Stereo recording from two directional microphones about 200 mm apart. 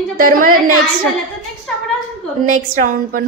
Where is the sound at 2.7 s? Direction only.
45° right (ahead or behind).